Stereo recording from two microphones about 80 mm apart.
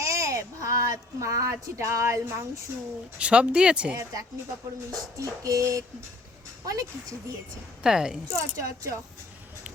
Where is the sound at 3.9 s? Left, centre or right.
Right.